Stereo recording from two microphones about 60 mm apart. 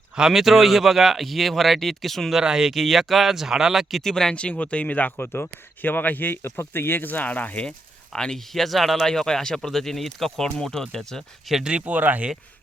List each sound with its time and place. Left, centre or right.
0.2 s speech: centre
2.4 s speech: centre
4.0 s speech: centre; by 7.6 s left
8.1 s speech: centre
11.5 s speech: centre
11.9 s speech: right